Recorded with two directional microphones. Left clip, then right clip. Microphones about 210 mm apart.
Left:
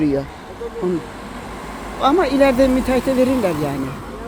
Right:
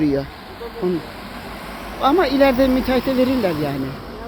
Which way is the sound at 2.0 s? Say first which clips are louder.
Left 1 dB; 5° right (ahead or behind).